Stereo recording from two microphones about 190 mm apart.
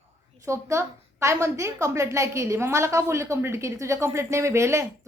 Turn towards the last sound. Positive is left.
turn(degrees=-15)  # may be behind; listen again after turning